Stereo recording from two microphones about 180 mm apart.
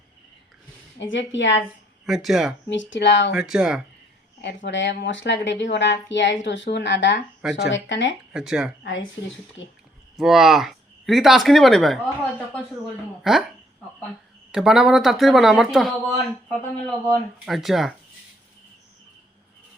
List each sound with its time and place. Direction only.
0.9 s a woman's voice: 90° left
2.0 s speech: centre (ahead or behind)
2.6 s speech: 85° left
3.3 s speech: 5° right (ahead or behind)
4.4 s speech: 85° left
7.7 s a woman's voice: 90° left
8.3 s speech: 5° right (ahead or behind)
8.8 s a woman's voice: 90° left
10.2 s speech: centre (ahead or behind)
13.2 s speech: centre (ahead or behind)
14.5 s speech: centre (ahead or behind)